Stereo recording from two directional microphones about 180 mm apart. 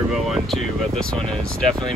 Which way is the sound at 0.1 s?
Centre (ahead or behind).